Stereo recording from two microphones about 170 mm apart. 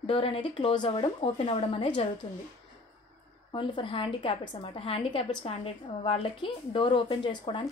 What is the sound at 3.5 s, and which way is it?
A woman's voice, 30° left (ahead or behind).